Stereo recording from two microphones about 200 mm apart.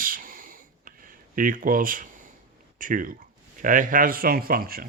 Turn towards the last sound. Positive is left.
turn(degrees=-50)  # may be behind; listen again after turning